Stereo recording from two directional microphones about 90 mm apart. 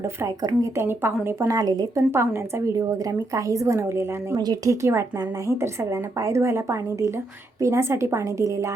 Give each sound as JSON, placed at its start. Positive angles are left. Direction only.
{"t": 0.0, "sound": "a woman's voice", "side_deg": -30}
{"t": 1.5, "sound": "speech", "side_deg": -45}
{"t": 2.0, "sound": "a woman's voice", "side_deg": -30}
{"t": 2.7, "sound": "a woman's voice", "side_deg": -45}
{"t": 4.4, "sound": "speech", "side_deg": -50}
{"t": 4.7, "sound": "a woman's voice", "side_deg": -30}